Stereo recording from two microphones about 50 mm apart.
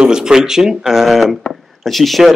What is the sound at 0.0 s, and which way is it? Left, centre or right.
Speech, centre.